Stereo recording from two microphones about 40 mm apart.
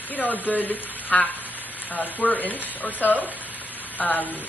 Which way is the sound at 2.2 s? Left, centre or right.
Left.